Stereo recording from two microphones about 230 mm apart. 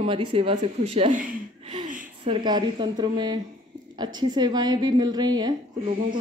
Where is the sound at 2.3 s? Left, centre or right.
Centre.